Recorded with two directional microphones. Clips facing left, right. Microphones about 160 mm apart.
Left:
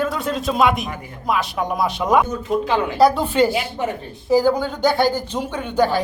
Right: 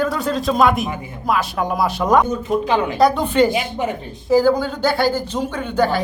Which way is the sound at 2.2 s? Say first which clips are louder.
Right 2 dB; 15° right (ahead or behind).